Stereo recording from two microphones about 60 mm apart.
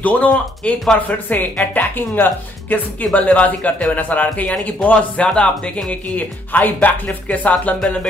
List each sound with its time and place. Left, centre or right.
0.0 s speech: left
3.1 s speech: left
6.1 s speech: left